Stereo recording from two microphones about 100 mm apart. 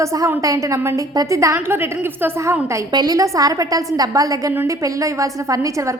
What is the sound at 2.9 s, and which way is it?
A woman's voice, 40° right (ahead or behind).